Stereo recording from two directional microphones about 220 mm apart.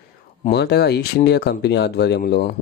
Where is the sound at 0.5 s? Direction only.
50° left (ahead or behind).